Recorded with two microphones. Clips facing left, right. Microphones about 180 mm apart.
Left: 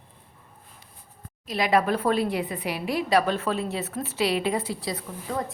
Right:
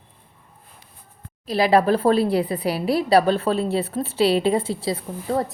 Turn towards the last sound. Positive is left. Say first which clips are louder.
# right 7 dB
turn(degrees=-30)  # may be behind; listen again after turning